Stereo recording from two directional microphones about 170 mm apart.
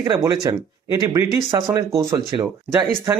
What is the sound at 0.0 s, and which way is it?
Speech, 20° right (ahead or behind).